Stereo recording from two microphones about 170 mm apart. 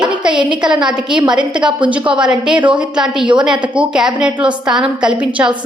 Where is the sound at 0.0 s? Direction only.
5° right (ahead or behind).